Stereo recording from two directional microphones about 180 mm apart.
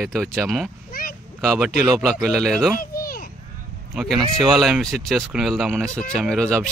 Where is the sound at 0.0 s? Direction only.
5° left (ahead or behind).